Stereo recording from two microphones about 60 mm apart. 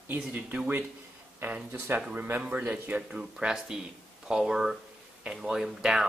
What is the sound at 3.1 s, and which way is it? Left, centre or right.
Speech, centre.